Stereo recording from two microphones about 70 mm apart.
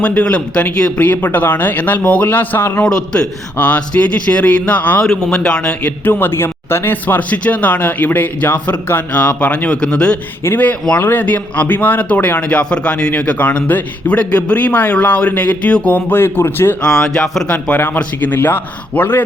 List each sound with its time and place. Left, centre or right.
0.0 s a man's voice: centre
2.8 s a man's voice: centre
5.2 s a man's voice: centre
6.1 s a man's voice: left; by 10.2 s centre
10.4 s a man's voice: left
16.8 s a man's voice: centre
17.9 s a man's voice: left